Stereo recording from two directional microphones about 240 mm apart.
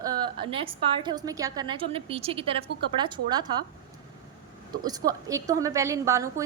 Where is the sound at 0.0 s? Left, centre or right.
Centre.